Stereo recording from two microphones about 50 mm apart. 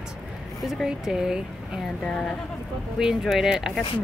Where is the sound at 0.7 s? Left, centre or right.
Centre.